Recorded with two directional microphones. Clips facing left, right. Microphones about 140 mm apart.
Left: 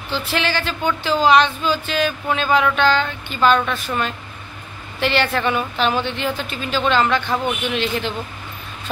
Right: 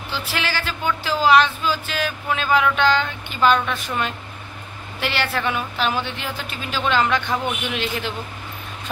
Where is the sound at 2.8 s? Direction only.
15° right (ahead or behind).